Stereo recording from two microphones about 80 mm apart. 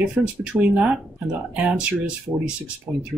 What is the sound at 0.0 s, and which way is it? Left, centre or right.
Speech, centre.